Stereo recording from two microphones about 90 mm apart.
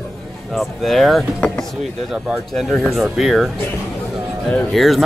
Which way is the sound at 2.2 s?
Centre (ahead or behind).